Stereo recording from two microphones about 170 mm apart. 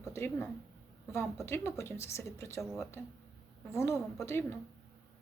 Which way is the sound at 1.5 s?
15° left (ahead or behind).